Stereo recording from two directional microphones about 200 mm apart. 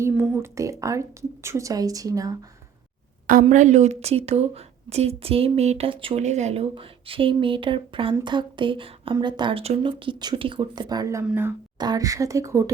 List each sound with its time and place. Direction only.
0.0 s a woman's voice: 10° right (ahead or behind)
3.4 s a woman's voice: 35° right (ahead or behind); by 12.7 s 15° right (ahead or behind)